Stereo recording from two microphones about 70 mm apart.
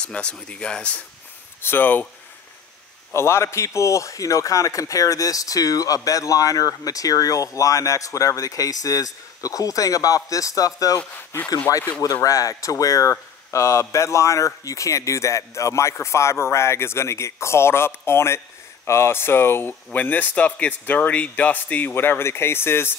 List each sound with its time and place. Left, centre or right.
0.0 s speech: centre
1.6 s speech: left
3.1 s a man's voice: left
11.0 s speech: centre
12.0 s speech: left